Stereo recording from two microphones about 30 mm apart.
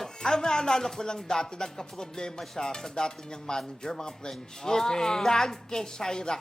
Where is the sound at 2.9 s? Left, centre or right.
Left.